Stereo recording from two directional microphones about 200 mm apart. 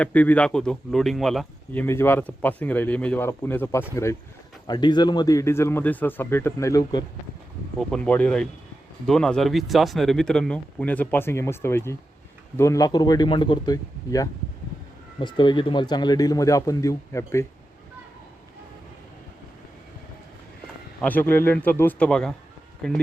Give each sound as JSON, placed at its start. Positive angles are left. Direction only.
{"t": 0.0, "sound": "speech", "side_deg": 10}
{"t": 7.8, "sound": "speech", "side_deg": 5}
{"t": 21.0, "sound": "speech", "side_deg": 10}